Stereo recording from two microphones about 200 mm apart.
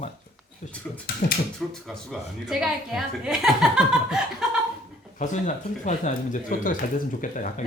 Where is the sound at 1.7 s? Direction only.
Centre (ahead or behind).